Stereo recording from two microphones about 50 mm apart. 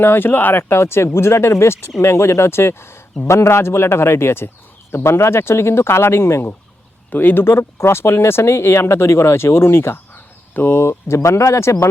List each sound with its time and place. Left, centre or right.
0.0 s speech: left
0.7 s speech: left
7.1 s speech: left
7.4 s speech: left
10.8 s speech: left